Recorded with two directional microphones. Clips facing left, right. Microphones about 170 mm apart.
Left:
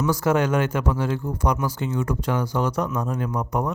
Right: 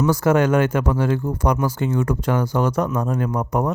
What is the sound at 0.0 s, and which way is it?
Speech, 50° right (ahead or behind).